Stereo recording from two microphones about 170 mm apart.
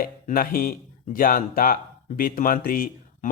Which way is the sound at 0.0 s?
55° left (ahead or behind).